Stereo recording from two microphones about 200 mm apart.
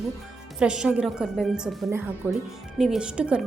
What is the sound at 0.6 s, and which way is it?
A woman's voice, 5° right (ahead or behind).